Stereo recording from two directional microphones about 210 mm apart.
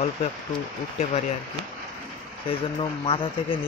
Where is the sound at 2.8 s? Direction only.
25° left (ahead or behind).